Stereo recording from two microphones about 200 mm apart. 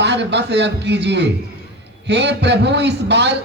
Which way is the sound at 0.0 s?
60° right (ahead or behind).